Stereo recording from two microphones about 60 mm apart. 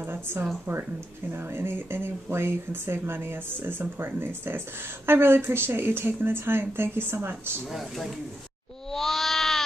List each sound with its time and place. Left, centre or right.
0.0 s a woman's voice: right
7.7 s speech: centre
8.9 s a sound: centre